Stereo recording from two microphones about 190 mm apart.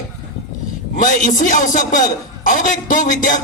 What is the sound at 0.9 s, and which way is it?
Speech, 45° left (ahead or behind).